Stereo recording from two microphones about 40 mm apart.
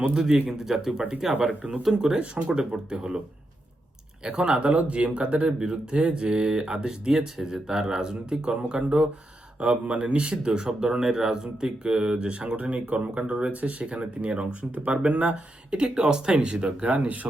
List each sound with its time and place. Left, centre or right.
0.6 s speech: centre
1.4 s speech: right
4.2 s speech: right